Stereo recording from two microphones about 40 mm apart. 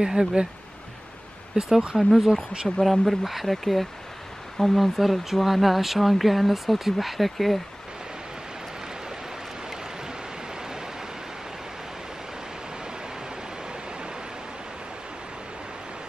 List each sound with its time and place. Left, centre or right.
0.0 s speech: centre
1.5 s speech: centre